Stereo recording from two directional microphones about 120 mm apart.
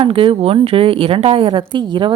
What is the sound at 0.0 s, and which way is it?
A woman's voice, 50° right (ahead or behind).